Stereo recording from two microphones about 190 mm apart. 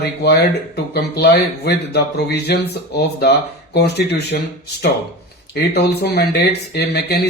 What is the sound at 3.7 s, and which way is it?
Speech, 60° left (ahead or behind).